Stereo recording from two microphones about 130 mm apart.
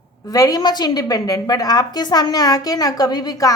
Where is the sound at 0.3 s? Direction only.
30° left (ahead or behind).